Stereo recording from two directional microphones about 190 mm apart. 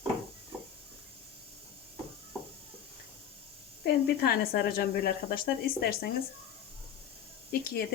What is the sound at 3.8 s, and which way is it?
Speech, 55° left (ahead or behind).